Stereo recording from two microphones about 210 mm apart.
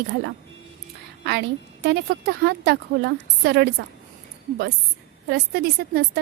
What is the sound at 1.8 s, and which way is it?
A woman's voice, 50° right (ahead or behind).